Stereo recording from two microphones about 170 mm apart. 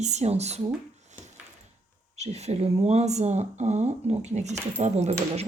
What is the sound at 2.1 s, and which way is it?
Speech, 40° right (ahead or behind).